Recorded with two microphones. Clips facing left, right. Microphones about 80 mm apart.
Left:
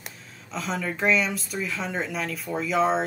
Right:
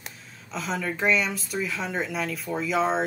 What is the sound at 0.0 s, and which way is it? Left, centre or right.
Speech, centre.